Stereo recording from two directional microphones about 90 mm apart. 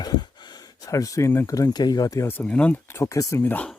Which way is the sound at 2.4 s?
15° left (ahead or behind).